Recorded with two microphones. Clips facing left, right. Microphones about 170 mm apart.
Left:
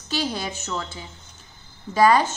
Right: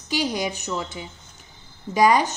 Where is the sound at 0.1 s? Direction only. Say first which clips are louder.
Right 2 dB; 15° right (ahead or behind).